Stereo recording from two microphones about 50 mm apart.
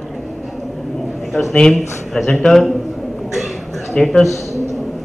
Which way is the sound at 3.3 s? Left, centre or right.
Centre.